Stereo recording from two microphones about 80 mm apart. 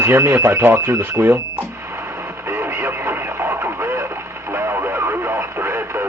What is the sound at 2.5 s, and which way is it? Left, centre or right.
Radio, right.